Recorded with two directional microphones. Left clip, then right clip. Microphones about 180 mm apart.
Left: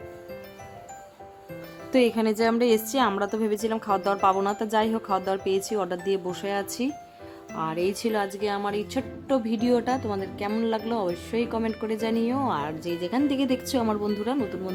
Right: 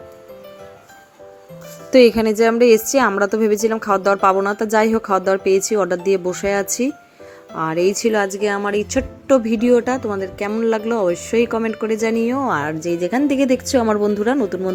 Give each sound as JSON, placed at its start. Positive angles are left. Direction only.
{"t": 1.9, "sound": "speech", "side_deg": -20}